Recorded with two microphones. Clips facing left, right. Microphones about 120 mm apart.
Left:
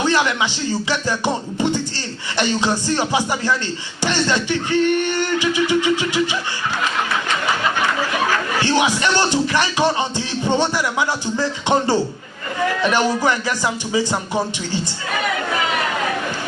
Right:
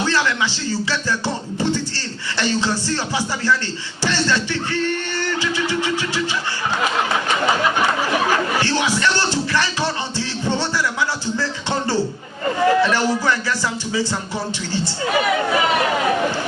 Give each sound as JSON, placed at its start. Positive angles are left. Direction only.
{"t": 0.0, "sound": "music", "side_deg": 15}
{"t": 8.6, "sound": "music", "side_deg": 15}